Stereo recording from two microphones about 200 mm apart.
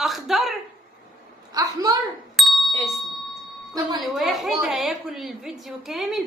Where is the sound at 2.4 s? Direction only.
Centre (ahead or behind).